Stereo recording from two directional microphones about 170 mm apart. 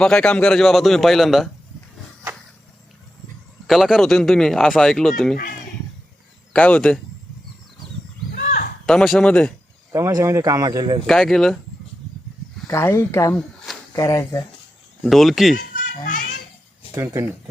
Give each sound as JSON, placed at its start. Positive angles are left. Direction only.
{"t": 0.0, "sound": "speech", "side_deg": 5}
{"t": 3.7, "sound": "speech", "side_deg": 0}
{"t": 6.5, "sound": "speech", "side_deg": 10}
{"t": 8.4, "sound": "a sound", "side_deg": 55}
{"t": 8.9, "sound": "speech", "side_deg": 5}
{"t": 9.9, "sound": "speech", "side_deg": -20}
{"t": 11.0, "sound": "speech", "side_deg": 0}
{"t": 12.6, "sound": "speech", "side_deg": 15}
{"t": 15.0, "sound": "speech", "side_deg": 0}
{"t": 16.9, "sound": "speech", "side_deg": -15}